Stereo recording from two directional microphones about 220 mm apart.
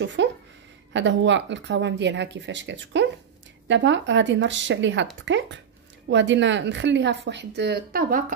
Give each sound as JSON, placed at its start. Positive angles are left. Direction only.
{"t": 0.0, "sound": "speech", "side_deg": -55}